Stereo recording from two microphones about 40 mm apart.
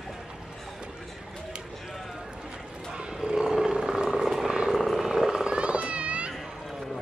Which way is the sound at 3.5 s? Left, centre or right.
Centre.